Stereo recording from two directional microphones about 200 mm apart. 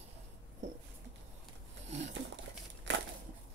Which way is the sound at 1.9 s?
65° right (ahead or behind).